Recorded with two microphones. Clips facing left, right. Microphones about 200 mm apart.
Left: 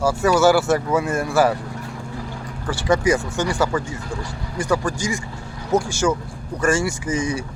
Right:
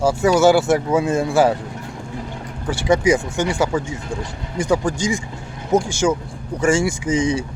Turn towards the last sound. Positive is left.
turn(degrees=-15)  # may be behind; listen again after turning